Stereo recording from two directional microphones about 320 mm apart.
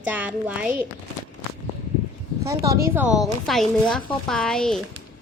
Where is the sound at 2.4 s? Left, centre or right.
Centre.